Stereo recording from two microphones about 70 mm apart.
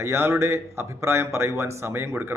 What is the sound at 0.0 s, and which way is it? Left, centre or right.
Speech, right.